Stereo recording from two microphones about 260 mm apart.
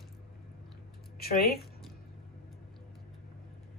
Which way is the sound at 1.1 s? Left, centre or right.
Left.